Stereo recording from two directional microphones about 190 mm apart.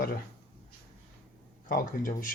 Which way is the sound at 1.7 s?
45° left (ahead or behind).